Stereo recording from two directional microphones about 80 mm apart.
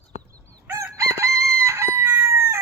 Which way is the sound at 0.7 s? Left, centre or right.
Right.